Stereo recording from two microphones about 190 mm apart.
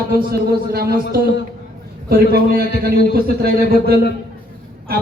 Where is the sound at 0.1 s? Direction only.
55° right (ahead or behind).